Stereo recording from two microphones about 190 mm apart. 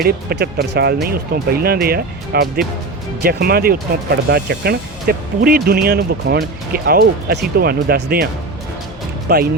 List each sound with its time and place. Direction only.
0.0 s speech: 55° right (ahead or behind)
9.3 s speech: 50° right (ahead or behind)